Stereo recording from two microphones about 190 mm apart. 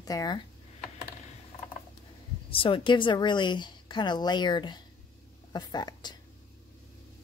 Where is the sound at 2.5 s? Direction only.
25° left (ahead or behind).